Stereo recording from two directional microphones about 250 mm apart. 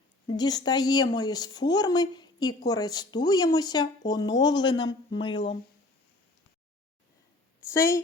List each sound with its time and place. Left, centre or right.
0.3 s speech: centre
7.7 s speech: centre